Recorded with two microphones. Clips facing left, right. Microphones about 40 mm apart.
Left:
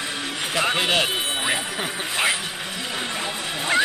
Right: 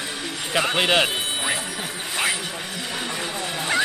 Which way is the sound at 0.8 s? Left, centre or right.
Centre.